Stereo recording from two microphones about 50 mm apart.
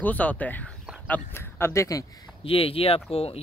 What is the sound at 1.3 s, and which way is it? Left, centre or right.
Speech, left.